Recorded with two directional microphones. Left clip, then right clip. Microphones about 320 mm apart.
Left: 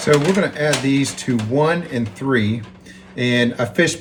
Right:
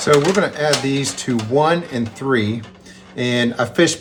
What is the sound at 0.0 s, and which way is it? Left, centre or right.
Speech, centre.